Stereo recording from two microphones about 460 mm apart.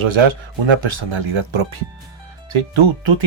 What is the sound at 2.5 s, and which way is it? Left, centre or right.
Speech, right.